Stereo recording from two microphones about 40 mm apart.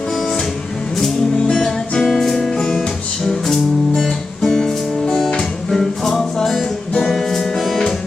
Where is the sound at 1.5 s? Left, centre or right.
Centre.